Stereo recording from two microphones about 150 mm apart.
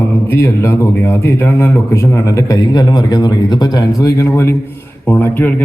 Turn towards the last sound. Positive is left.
turn(degrees=15)  # may be behind; listen again after turning